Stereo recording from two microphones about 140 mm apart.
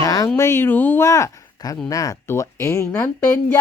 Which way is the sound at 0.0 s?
25° left (ahead or behind).